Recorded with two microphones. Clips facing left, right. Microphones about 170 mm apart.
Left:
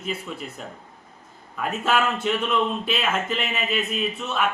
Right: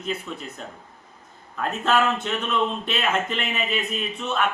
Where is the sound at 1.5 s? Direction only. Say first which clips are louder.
Right 1 dB; 5° left (ahead or behind).